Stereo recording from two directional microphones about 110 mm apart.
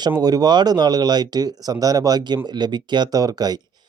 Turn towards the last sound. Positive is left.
turn(degrees=-35)  # may be behind; listen again after turning